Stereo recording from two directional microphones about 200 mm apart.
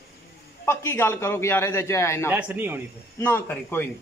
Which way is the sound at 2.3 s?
10° right (ahead or behind).